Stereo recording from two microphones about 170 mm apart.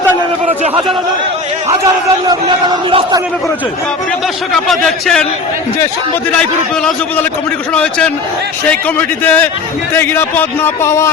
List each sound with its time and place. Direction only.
2.2 s speech: 25° right (ahead or behind)
4.5 s speech: centre (ahead or behind)
7.7 s a man's voice: 5° left (ahead or behind)